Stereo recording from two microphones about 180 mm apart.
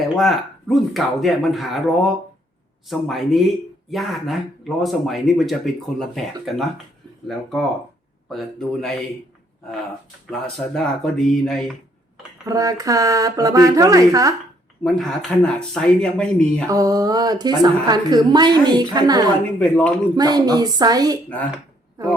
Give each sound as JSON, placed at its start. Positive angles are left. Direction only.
{"t": 0.0, "sound": "speech", "side_deg": 0}
{"t": 8.3, "sound": "speech", "side_deg": 0}
{"t": 10.2, "sound": "speech", "side_deg": 5}
{"t": 12.5, "sound": "a woman's voice", "side_deg": -20}
{"t": 14.8, "sound": "speech", "side_deg": 0}
{"t": 16.6, "sound": "a woman's voice", "side_deg": -20}
{"t": 19.5, "sound": "speech", "side_deg": 5}
{"t": 20.1, "sound": "a woman's voice", "side_deg": -20}